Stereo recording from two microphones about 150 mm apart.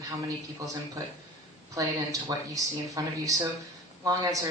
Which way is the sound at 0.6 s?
20° right (ahead or behind).